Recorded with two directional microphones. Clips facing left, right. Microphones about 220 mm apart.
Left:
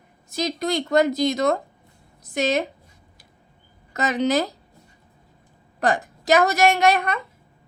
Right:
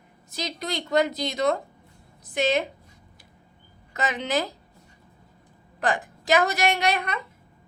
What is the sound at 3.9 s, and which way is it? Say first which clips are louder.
Speech: left 6 dB; 40° left (ahead or behind).